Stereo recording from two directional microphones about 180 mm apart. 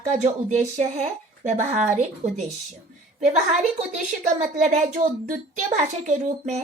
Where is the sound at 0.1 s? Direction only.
40° right (ahead or behind).